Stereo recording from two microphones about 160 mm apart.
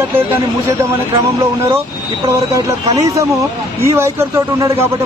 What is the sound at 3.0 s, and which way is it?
A man's voice, 20° right (ahead or behind).